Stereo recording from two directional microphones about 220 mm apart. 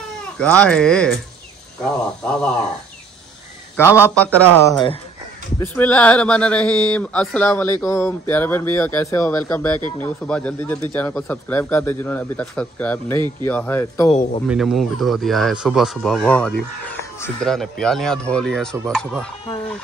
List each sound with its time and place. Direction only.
0.4 s speech: 5° left (ahead or behind)
3.7 s speech: 10° left (ahead or behind)
4.6 s speech: 15° left (ahead or behind)
14.5 s speech: centre (ahead or behind)